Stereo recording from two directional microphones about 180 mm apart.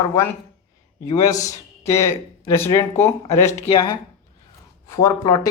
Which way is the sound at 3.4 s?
40° left (ahead or behind).